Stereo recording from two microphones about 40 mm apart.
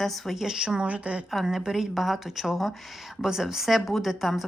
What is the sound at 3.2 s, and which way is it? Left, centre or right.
A woman's voice, centre.